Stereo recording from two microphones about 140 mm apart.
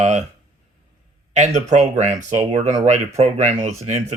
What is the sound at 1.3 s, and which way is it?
Speech, 55° right (ahead or behind).